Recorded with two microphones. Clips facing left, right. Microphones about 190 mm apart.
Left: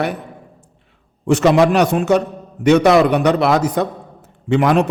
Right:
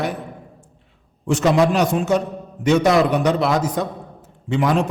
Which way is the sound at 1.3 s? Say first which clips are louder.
Left 4 dB; 70° left (ahead or behind).